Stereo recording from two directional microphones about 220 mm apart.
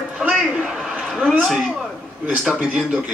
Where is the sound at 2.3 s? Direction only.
Centre (ahead or behind).